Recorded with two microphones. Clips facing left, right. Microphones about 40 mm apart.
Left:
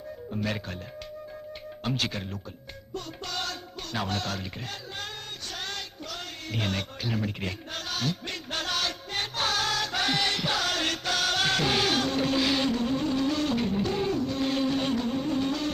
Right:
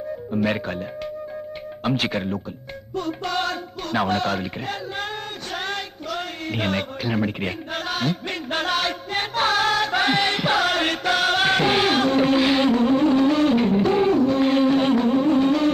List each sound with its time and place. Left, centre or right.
0.4 s speech: right
1.8 s speech: right
3.0 s music: right